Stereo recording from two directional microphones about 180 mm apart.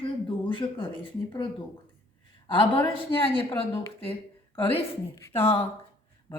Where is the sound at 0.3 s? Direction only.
25° left (ahead or behind).